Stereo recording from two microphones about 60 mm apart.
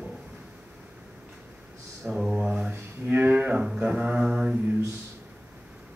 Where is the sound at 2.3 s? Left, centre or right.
Centre.